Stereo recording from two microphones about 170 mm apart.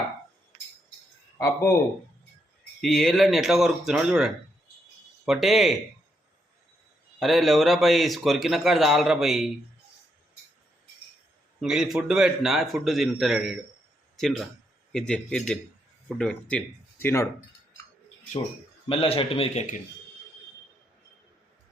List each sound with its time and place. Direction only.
1.4 s speech: 15° left (ahead or behind)
2.8 s speech: 5° left (ahead or behind)
7.2 s speech: centre (ahead or behind)
11.6 s speech: 5° right (ahead or behind); by 17.2 s 15° left (ahead or behind)
18.9 s speech: 35° left (ahead or behind)